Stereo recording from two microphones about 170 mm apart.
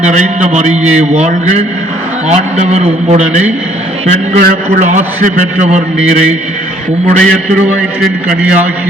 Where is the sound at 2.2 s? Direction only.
40° right (ahead or behind).